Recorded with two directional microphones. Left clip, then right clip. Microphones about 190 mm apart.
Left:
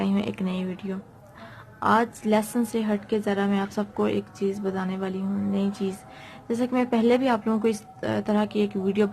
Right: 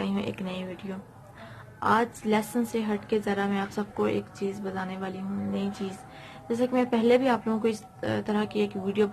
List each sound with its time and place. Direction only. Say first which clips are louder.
0.0 s a woman's voice: left 4 dB; 35° left (ahead or behind)